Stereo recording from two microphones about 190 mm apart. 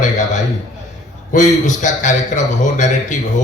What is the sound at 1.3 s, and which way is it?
Speech, 40° left (ahead or behind).